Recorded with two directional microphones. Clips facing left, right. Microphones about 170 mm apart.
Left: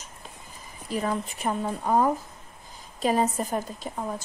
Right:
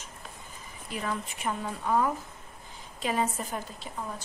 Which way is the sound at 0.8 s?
40° left (ahead or behind).